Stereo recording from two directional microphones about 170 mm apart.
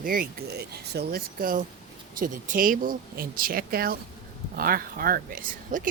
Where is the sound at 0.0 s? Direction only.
55° right (ahead or behind).